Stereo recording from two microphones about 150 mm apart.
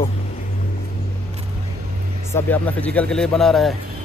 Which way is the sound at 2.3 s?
10° left (ahead or behind).